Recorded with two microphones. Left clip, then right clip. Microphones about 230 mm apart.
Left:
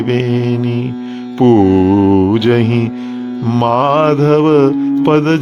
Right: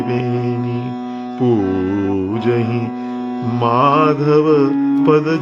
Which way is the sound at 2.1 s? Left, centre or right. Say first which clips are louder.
Left 6 dB; left.